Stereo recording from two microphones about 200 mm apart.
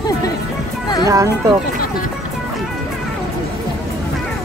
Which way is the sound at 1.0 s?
15° right (ahead or behind).